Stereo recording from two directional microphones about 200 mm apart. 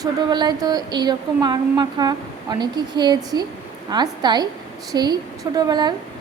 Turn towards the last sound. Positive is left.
turn(degrees=-20)  # may be behind; listen again after turning